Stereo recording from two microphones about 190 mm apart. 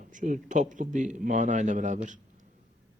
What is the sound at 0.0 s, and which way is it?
A man's voice, 40° right (ahead or behind).